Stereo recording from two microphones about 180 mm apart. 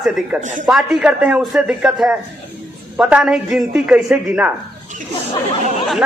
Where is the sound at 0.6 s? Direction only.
5° right (ahead or behind).